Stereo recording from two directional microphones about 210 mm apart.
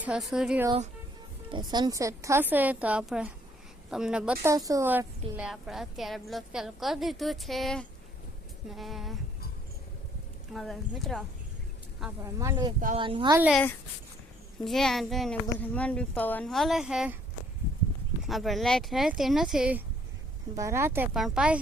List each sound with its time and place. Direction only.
0.0 s a woman's voice: centre (ahead or behind)
1.5 s a woman's voice: 20° right (ahead or behind); by 4.5 s 5° right (ahead or behind)
4.5 s a woman's voice: 15° right (ahead or behind); by 9.1 s centre (ahead or behind)
10.5 s a woman's voice: centre (ahead or behind)
12.2 s a woman's voice: 15° right (ahead or behind)
13.5 s a woman's voice: 5° left (ahead or behind)
18.2 s a woman's voice: centre (ahead or behind)